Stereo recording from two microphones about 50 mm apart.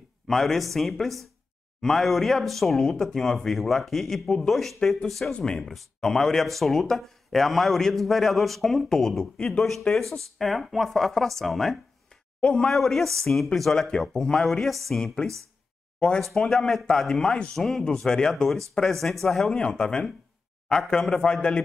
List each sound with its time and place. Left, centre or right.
0.3 s speech: centre
5.3 s speech: centre
12.4 s a man's voice: centre
12.7 s speech: centre
16.2 s speech: centre